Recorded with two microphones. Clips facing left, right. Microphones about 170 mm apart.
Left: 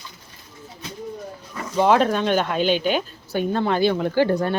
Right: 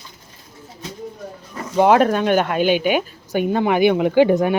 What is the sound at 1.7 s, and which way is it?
Speech, 10° right (ahead or behind).